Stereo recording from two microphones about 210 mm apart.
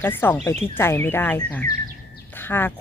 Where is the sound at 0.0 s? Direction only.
10° left (ahead or behind).